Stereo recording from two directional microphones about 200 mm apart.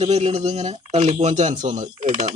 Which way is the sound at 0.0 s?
30° right (ahead or behind).